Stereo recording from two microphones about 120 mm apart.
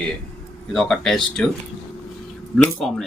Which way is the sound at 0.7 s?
5° left (ahead or behind).